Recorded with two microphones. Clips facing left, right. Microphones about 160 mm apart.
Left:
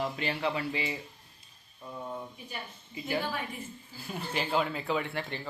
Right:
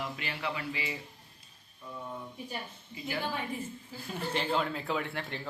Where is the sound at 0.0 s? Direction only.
30° left (ahead or behind).